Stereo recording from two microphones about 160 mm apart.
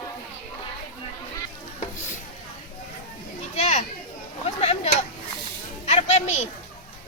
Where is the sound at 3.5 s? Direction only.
50° left (ahead or behind).